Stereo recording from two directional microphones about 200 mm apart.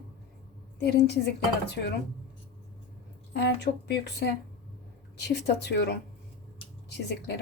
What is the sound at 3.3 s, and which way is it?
Speech, 55° left (ahead or behind).